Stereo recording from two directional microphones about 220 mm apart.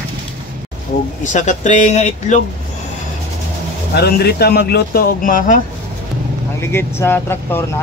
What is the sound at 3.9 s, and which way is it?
Speech, 45° left (ahead or behind).